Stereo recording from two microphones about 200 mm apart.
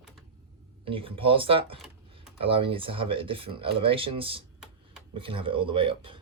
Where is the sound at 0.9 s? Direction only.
25° right (ahead or behind).